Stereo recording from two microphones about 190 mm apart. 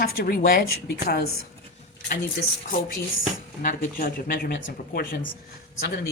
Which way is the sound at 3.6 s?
45° left (ahead or behind).